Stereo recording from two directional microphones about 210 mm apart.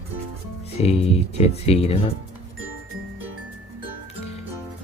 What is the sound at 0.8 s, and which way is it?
Speech, 30° left (ahead or behind).